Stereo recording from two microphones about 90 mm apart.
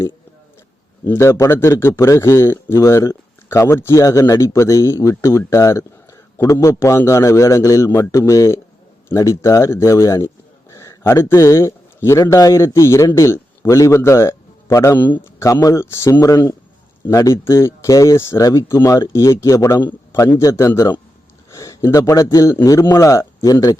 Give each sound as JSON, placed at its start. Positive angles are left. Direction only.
{"t": 1.0, "sound": "a man's voice", "side_deg": 30}
{"t": 14.9, "sound": "a man's voice", "side_deg": 20}
{"t": 15.6, "sound": "speech", "side_deg": 30}